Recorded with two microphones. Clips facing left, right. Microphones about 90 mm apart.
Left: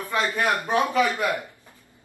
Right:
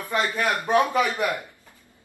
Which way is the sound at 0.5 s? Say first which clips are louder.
Right 2 dB; 20° right (ahead or behind).